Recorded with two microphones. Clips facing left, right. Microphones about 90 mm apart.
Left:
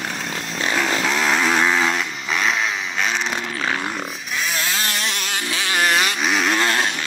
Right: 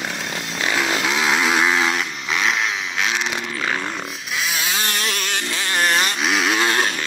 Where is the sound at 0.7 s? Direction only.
5° right (ahead or behind).